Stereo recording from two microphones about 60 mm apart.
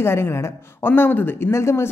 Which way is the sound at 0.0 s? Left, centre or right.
Left.